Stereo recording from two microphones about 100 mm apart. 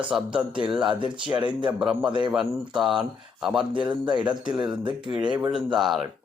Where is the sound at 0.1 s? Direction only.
5° right (ahead or behind).